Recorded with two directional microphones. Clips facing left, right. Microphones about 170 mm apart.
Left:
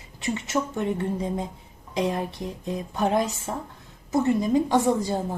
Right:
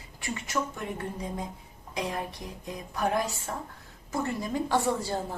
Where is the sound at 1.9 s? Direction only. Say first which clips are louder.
Left 7 dB; 25° left (ahead or behind).